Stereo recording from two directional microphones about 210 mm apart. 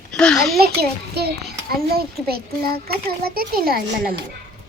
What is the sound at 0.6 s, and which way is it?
Speech, 50° right (ahead or behind).